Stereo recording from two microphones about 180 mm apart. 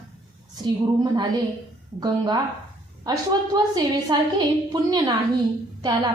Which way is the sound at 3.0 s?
20° right (ahead or behind).